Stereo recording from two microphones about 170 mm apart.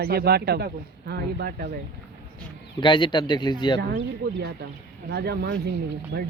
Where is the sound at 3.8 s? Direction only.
80° right.